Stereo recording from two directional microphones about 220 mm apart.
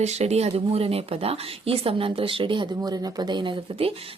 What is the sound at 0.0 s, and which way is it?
A woman's voice, 30° right (ahead or behind).